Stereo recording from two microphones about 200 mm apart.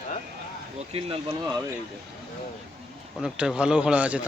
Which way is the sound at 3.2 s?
5° right (ahead or behind).